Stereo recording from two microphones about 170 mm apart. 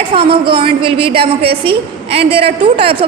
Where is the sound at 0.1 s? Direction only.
35° right (ahead or behind).